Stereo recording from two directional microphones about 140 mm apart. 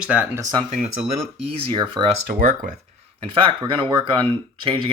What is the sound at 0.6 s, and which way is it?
Speech, 55° right (ahead or behind).